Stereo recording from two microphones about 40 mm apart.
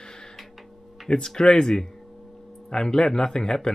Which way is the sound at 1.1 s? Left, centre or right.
Centre.